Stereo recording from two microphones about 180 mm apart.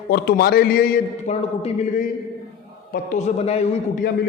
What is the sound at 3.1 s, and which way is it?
Speech, 40° left (ahead or behind).